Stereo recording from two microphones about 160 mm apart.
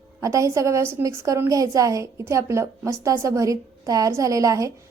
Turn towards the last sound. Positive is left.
turn(degrees=-20)  # may be behind; listen again after turning